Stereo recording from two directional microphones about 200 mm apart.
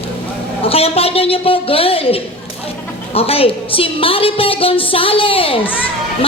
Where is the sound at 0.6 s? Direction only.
30° left (ahead or behind).